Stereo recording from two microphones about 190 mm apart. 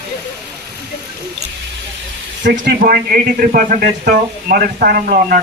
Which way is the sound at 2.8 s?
50° right (ahead or behind).